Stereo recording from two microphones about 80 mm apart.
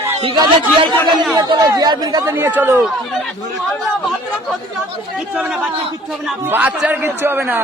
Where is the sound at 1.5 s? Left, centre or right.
Right.